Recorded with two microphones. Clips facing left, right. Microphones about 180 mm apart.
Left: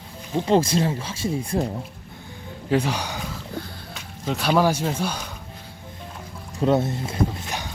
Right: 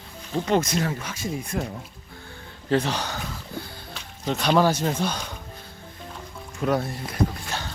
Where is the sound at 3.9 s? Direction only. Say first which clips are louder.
Even; centre (ahead or behind).